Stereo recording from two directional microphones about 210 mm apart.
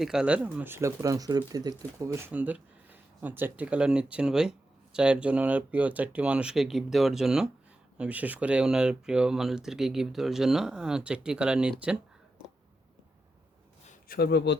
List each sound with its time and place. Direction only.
0.0 s speech: 5° right (ahead or behind)
13.8 s speech: 45° left (ahead or behind)